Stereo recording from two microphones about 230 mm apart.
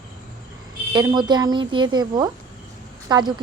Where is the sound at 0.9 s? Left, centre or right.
Centre.